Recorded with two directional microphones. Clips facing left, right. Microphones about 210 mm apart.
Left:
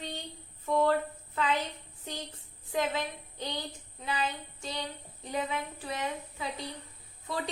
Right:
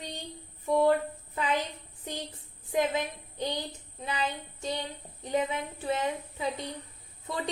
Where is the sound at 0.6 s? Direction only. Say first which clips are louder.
Right 3 dB; 15° right (ahead or behind).